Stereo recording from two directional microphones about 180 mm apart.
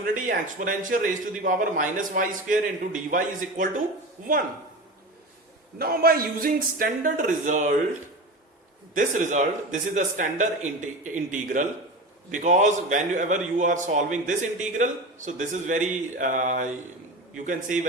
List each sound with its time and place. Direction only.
0.0 s a man's voice: 50° right (ahead or behind)
5.8 s a man's voice: 55° right (ahead or behind)
9.0 s a man's voice: 45° right (ahead or behind)